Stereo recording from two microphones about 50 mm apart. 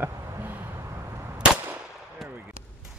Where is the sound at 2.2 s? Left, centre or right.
Centre.